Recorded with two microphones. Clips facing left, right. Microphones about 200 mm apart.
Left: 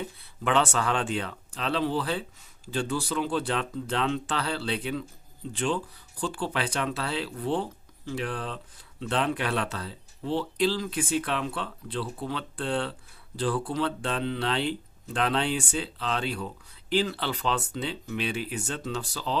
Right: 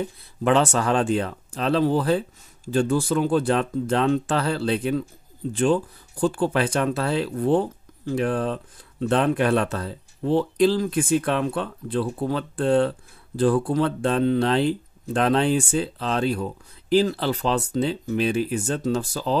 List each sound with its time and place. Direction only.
0.4 s speech: 40° right (ahead or behind)